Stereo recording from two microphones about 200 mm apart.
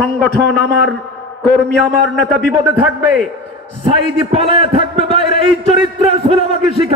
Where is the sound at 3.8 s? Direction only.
30° right (ahead or behind).